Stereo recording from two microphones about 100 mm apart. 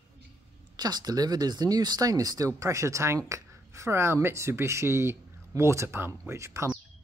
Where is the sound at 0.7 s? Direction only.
40° right (ahead or behind).